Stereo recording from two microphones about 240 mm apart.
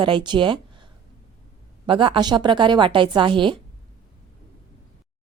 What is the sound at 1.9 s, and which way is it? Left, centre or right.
A woman's voice, centre.